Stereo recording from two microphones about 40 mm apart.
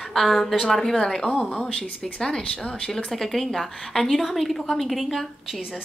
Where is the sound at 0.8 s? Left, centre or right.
Centre.